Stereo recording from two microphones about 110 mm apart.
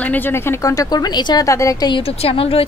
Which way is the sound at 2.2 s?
60° left (ahead or behind).